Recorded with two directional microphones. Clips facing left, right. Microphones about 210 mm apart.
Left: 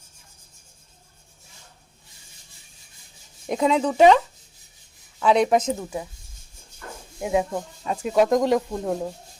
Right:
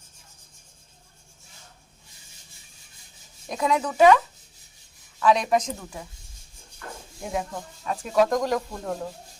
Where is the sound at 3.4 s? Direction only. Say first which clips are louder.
Left 4 dB; 25° left (ahead or behind).